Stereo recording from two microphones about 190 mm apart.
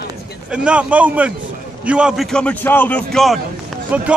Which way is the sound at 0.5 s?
5° right (ahead or behind).